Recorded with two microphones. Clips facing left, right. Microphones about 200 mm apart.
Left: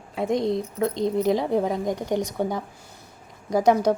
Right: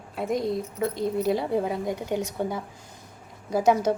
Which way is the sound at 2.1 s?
15° left (ahead or behind).